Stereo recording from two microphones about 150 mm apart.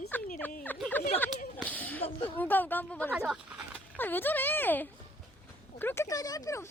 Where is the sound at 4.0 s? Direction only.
10° left (ahead or behind).